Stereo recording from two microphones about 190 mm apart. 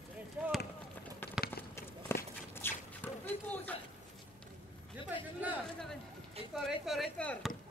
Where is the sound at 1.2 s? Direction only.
10° left (ahead or behind).